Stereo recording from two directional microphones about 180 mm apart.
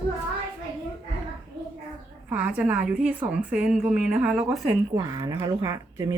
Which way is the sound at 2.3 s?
10° right (ahead or behind).